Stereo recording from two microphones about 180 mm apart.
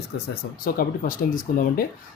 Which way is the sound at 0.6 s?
50° left (ahead or behind).